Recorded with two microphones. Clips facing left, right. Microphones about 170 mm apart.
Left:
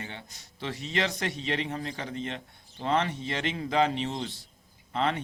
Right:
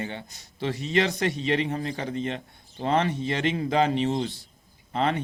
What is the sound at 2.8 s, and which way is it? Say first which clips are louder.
A man's voice: right 3 dB; 45° right (ahead or behind).